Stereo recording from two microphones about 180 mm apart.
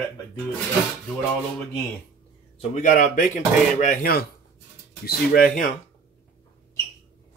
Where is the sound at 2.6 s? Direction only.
45° left (ahead or behind).